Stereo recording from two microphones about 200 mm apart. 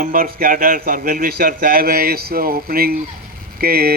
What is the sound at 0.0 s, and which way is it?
Speech, 45° right (ahead or behind).